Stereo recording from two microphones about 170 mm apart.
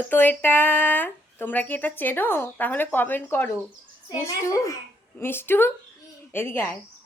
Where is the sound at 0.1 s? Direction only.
10° left (ahead or behind).